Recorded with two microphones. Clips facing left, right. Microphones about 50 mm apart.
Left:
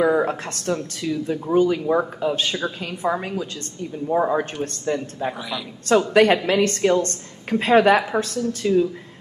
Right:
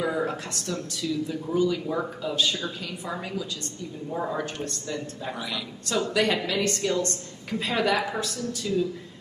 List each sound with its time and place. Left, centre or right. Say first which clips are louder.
0.0 s speech: left 8 dB; left